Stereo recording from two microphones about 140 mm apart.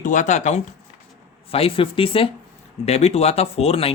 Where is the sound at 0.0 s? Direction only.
65° left (ahead or behind).